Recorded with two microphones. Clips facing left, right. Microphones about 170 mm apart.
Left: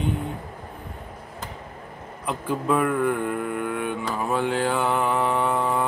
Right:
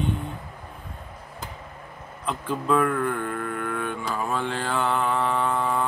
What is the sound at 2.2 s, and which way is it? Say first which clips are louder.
Speech: left 2 dB; 10° left (ahead or behind).